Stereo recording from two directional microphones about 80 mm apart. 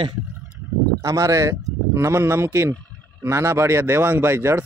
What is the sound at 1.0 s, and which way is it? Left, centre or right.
Speech, right.